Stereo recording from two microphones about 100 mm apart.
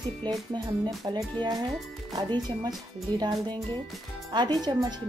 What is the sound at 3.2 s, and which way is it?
Speech, 50° right (ahead or behind).